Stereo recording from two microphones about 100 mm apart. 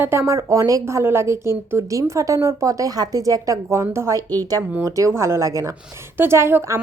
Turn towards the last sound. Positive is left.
turn(degrees=-25)  # may be behind; listen again after turning